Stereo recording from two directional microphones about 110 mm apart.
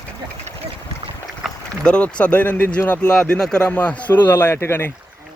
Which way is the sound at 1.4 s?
5° right (ahead or behind).